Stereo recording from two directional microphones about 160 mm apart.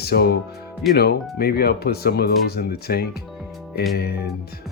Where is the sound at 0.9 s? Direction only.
75° left (ahead or behind).